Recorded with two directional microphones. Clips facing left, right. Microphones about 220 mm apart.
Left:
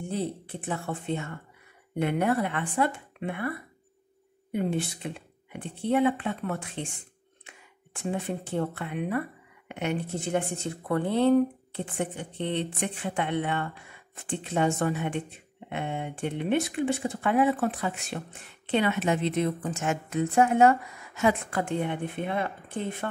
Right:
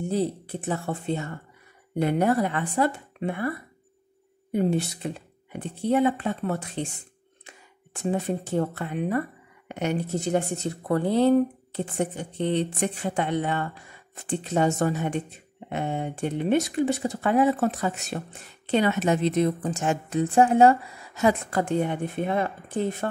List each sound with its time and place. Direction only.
0.1 s speech: 40° right (ahead or behind)